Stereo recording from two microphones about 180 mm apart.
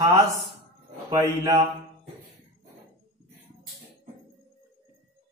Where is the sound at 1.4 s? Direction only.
25° right (ahead or behind).